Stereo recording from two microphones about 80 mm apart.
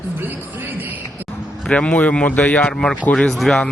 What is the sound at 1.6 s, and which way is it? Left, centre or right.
Speech, centre.